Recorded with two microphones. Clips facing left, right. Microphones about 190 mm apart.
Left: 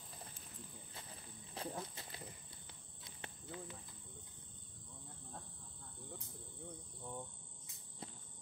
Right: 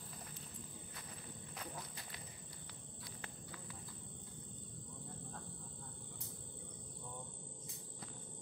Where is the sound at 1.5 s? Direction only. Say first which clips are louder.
Left 6 dB; 25° left (ahead or behind).